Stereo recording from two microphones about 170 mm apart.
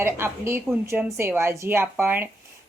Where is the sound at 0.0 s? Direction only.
15° right (ahead or behind).